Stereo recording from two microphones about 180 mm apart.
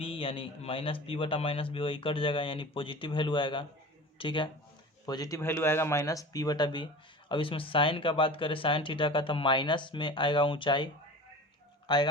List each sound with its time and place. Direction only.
0.0 s a man's voice: 30° left (ahead or behind)
11.9 s a man's voice: 25° left (ahead or behind)